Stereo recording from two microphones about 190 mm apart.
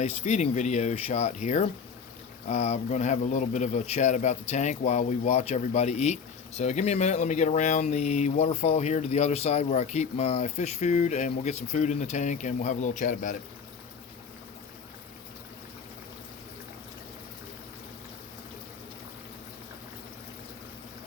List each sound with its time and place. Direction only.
0.0 s speech: 35° left (ahead or behind)